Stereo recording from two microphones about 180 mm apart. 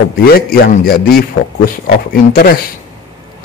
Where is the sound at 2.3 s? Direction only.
60° left (ahead or behind).